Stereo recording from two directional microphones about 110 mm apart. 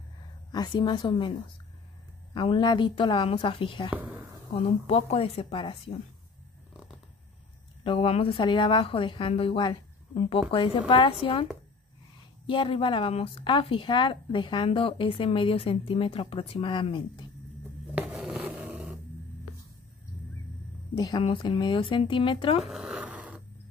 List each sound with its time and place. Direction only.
0.5 s speech: 40° left (ahead or behind)
2.3 s speech: 45° left (ahead or behind)
3.9 s speech: 15° right (ahead or behind)
4.5 s a woman's voice: 55° left (ahead or behind)
7.8 s speech: 55° left (ahead or behind)
12.4 s speech: 50° left (ahead or behind)
17.9 s a sound: 5° right (ahead or behind)
21.2 s speech: 50° left (ahead or behind)
22.6 s a sound: 5° right (ahead or behind)